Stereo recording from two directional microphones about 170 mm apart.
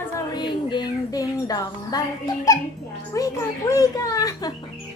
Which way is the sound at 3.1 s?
20° left (ahead or behind).